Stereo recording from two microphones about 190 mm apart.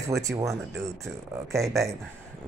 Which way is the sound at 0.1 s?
15° right (ahead or behind).